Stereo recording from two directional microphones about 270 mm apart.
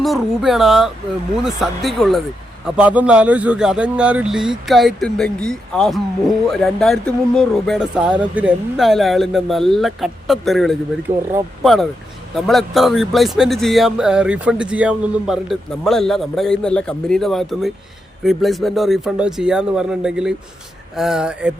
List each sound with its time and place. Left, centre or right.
0.0 s a man's voice: centre
11.1 s speech: right
11.6 s a man's voice: centre